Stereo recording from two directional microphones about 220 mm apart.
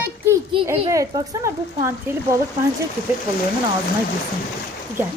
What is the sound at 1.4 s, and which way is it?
Speech, 15° right (ahead or behind).